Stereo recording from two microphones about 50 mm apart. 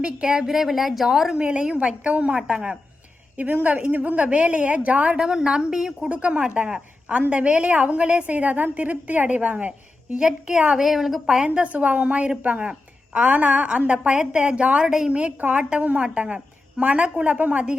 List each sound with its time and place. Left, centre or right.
0.0 s a woman's voice: centre
1.4 s a woman's voice: centre
3.3 s a woman's voice: right
5.1 s a woman's voice: centre
6.1 s a woman's voice: right
10.2 s a woman's voice: centre
14.8 s a woman's voice: centre